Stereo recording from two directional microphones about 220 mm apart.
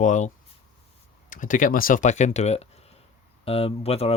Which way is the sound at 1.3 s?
35° left (ahead or behind).